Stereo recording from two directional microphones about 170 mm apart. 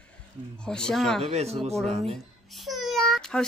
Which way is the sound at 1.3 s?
40° right (ahead or behind).